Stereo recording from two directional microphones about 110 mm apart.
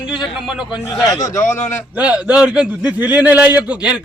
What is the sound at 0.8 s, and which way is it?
Speech, 30° left (ahead or behind).